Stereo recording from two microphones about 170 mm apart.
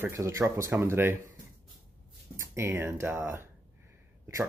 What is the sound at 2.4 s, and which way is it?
Speech, 15° right (ahead or behind).